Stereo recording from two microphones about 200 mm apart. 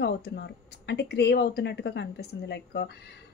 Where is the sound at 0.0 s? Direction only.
55° left (ahead or behind).